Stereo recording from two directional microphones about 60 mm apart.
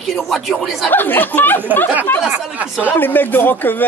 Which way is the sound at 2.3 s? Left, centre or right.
Right.